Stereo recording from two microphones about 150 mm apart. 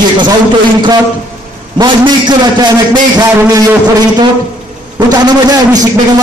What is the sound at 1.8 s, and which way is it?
A man's voice, 30° right (ahead or behind).